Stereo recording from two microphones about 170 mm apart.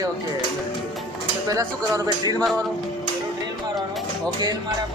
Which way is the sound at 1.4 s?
20° right (ahead or behind).